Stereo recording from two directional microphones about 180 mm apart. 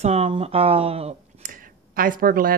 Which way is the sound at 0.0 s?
35° right (ahead or behind).